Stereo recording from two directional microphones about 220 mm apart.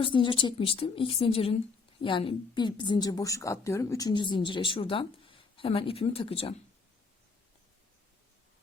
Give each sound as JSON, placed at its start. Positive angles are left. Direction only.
{"t": 0.0, "sound": "a woman's voice", "side_deg": 20}